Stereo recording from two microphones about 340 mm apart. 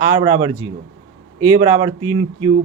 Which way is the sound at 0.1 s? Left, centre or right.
Centre.